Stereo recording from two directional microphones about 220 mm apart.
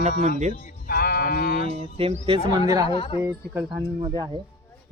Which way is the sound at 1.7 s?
25° right (ahead or behind).